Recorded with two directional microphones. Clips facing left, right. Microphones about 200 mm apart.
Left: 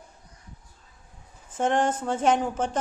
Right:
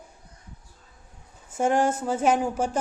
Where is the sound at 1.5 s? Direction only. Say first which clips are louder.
Right 1 dB; 10° right (ahead or behind).